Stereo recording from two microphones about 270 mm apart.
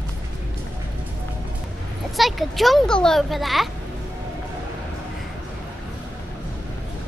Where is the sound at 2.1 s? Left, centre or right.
Centre.